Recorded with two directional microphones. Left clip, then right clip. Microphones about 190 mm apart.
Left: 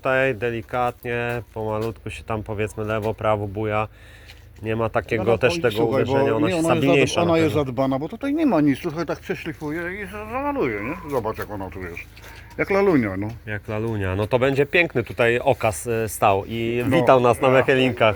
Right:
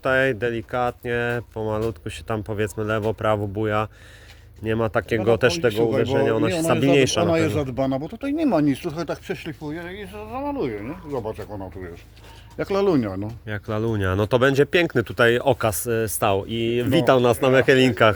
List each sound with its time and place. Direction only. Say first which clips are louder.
0.0 s speech: even; 60° right (ahead or behind)
5.7 s speech: even; 15° right (ahead or behind)
6.2 s speech: left 1 dB; 65° right (ahead or behind)
7.3 s speech: left 2 dB; 15° right (ahead or behind)
13.5 s speech: right 2 dB; 55° right (ahead or behind); by 18.1 s 75° right (ahead or behind)